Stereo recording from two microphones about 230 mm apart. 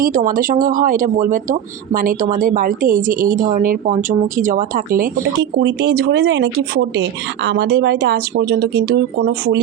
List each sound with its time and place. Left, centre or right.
0.0 s speech: right